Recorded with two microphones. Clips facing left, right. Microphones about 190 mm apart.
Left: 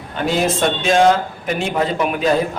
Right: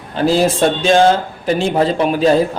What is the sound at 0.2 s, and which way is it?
Speech, 30° right (ahead or behind).